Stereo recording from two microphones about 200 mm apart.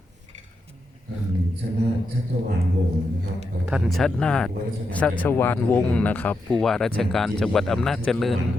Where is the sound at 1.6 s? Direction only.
50° right (ahead or behind).